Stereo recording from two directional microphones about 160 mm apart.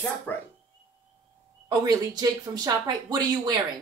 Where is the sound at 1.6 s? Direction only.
25° right (ahead or behind).